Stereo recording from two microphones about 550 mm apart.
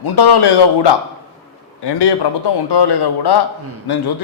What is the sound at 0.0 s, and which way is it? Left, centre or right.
A man's voice, left.